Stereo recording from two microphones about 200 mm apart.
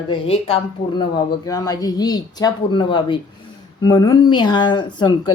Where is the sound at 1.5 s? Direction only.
15° left (ahead or behind).